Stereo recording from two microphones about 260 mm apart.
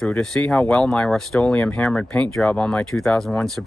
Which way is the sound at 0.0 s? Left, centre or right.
Centre.